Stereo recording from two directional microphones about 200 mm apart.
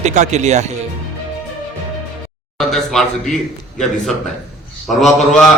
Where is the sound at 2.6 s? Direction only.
Centre (ahead or behind).